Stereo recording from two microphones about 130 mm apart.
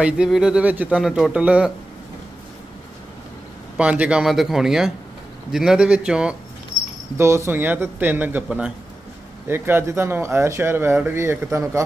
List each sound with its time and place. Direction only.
0.0 s speech: 5° right (ahead or behind)
3.7 s speech: 10° right (ahead or behind)
7.2 s speech: 20° right (ahead or behind)
9.5 s speech: 15° right (ahead or behind)